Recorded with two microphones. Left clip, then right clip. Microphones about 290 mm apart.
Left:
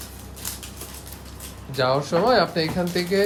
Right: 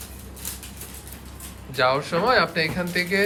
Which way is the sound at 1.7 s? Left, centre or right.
Centre.